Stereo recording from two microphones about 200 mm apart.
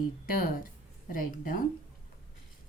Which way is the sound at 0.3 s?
45° left (ahead or behind).